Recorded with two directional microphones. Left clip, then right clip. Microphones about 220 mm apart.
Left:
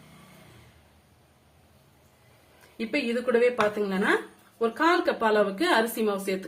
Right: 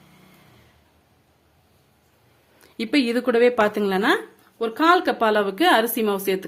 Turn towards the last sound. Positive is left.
turn(degrees=-40)  # may be behind; listen again after turning